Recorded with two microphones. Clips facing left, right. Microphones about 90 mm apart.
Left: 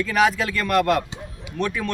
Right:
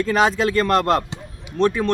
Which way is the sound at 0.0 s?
30° right (ahead or behind).